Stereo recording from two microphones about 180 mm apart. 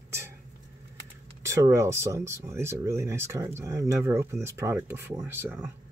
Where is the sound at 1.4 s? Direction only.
15° right (ahead or behind).